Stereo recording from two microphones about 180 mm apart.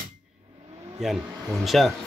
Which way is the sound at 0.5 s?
30° right (ahead or behind).